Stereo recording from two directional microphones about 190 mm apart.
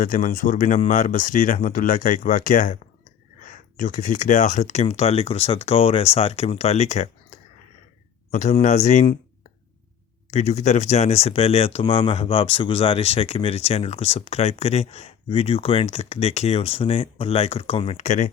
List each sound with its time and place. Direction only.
0.0 s speech: 45° left (ahead or behind)
10.3 s speech: 35° left (ahead or behind)